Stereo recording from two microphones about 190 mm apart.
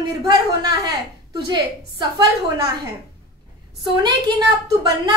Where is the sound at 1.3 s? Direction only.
20° right (ahead or behind).